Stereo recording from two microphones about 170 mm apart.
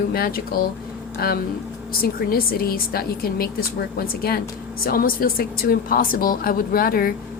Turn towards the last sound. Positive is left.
turn(degrees=60)  # may be behind; listen again after turning